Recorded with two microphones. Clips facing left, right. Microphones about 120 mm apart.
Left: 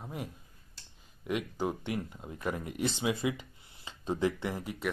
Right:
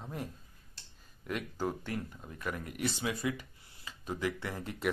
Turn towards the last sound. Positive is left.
turn(degrees=5)  # may be behind; listen again after turning